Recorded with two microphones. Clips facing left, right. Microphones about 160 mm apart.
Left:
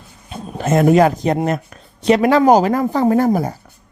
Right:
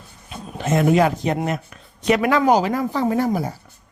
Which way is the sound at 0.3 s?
45° left (ahead or behind).